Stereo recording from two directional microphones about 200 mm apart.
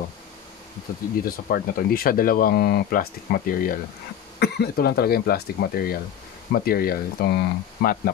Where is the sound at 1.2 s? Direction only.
45° left (ahead or behind).